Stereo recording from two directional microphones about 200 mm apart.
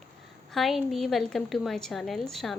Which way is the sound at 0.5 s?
Centre (ahead or behind).